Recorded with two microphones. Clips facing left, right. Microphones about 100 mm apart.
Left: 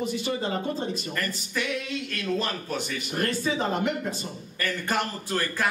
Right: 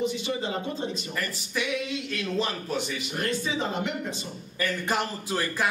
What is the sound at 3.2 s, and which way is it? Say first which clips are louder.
Speech: left 2 dB; 40° left (ahead or behind).